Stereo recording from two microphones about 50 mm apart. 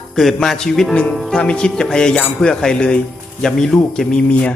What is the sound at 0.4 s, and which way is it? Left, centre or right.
Music, centre.